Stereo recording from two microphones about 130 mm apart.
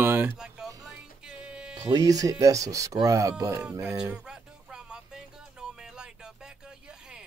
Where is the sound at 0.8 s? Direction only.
5° right (ahead or behind).